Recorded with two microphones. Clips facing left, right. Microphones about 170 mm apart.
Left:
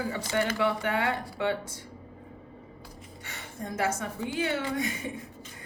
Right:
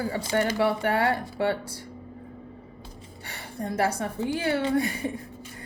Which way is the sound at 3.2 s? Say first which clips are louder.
Right 5 dB; 35° right (ahead or behind).